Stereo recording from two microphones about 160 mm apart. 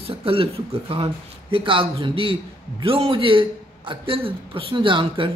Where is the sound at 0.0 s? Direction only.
35° right (ahead or behind).